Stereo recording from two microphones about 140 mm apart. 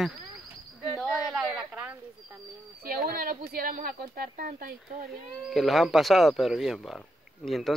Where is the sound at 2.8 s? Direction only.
90° right.